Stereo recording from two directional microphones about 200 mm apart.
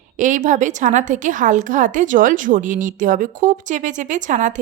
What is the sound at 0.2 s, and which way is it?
A woman's voice, 40° right (ahead or behind).